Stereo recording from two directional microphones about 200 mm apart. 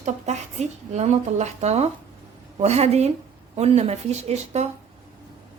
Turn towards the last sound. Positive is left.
turn(degrees=-35)  # may be behind; listen again after turning